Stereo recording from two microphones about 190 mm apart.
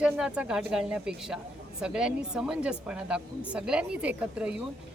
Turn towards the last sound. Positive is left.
turn(degrees=-5)  # may be behind; listen again after turning